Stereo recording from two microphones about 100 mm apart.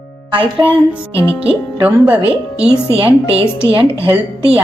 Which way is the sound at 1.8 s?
15° right (ahead or behind).